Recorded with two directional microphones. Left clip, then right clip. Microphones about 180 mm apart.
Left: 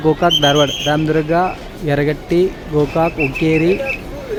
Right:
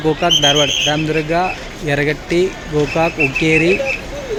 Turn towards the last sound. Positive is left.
turn(degrees=20)  # may be behind; listen again after turning